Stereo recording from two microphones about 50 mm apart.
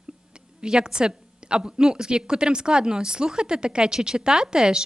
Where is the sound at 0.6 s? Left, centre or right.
Centre.